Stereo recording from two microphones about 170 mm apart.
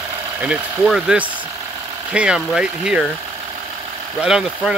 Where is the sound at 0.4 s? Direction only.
5° right (ahead or behind).